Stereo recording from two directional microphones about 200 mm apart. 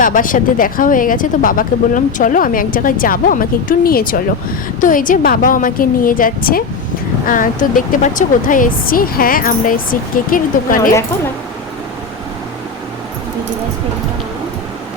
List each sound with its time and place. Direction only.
0.0 s speech: 45° left (ahead or behind)